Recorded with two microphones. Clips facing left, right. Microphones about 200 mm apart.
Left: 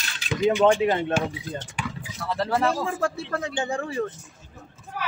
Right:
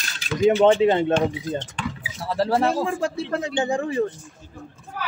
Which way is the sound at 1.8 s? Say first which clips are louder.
Right 3 dB; 10° left (ahead or behind).